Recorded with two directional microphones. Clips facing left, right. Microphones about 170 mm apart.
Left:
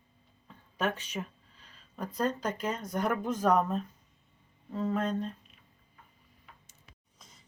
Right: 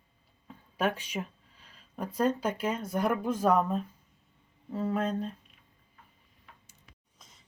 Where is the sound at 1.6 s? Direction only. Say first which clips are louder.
Right 2 dB; 10° right (ahead or behind).